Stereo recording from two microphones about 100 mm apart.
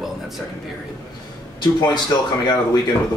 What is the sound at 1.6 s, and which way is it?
Speech, 45° left (ahead or behind).